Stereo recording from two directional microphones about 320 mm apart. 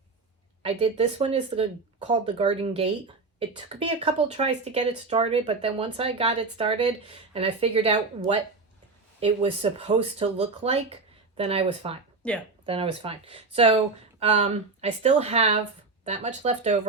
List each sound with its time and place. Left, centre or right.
0.6 s speech: centre
12.2 s speech: centre
12.6 s speech: centre